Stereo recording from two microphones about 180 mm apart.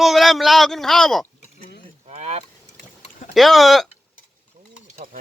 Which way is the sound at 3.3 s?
Centre (ahead or behind).